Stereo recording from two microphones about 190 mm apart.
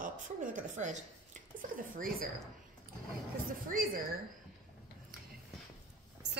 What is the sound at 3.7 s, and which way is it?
Speech, 50° right (ahead or behind).